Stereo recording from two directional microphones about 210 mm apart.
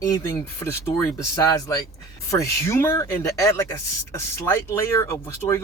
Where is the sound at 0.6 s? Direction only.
15° left (ahead or behind).